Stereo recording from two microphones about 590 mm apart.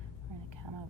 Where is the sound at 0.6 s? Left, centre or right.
Right.